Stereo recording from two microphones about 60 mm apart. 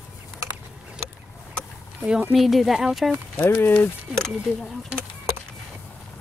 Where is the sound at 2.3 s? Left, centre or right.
Centre.